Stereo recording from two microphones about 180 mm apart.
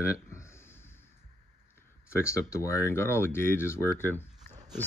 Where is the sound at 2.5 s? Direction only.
15° left (ahead or behind).